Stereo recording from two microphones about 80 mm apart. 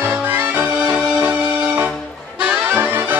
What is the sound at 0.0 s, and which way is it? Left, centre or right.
Music, right.